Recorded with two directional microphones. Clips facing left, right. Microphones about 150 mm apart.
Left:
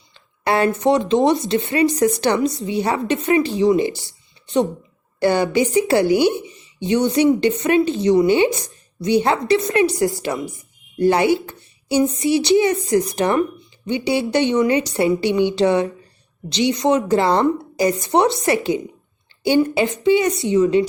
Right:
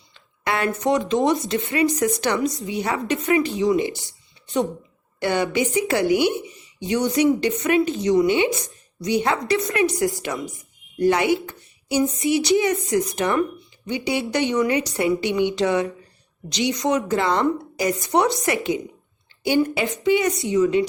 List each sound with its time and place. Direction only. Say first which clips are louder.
0.4 s a woman's voice: left 5 dB; 30° left (ahead or behind)
5.2 s a woman's voice: left 5 dB; 35° left (ahead or behind)